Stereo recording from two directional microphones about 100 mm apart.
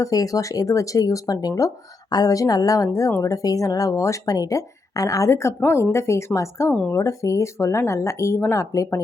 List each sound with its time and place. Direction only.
0.0 s speech: 35° left (ahead or behind)